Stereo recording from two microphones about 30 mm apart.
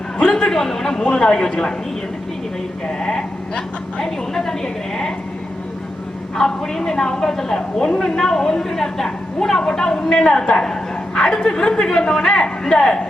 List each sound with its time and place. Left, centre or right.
0.2 s a man's voice: left
2.8 s a woman's voice: left
6.3 s a woman's voice: centre
10.6 s dog: left
11.3 s a woman's voice: left